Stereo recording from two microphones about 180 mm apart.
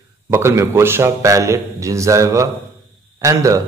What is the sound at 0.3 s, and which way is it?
A man's voice, 15° right (ahead or behind).